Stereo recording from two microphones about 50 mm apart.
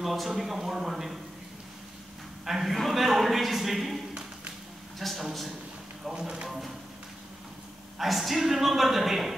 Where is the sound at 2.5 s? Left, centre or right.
Centre.